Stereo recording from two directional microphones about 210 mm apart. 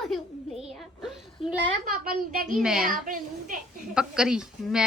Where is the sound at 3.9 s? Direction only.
5° right (ahead or behind).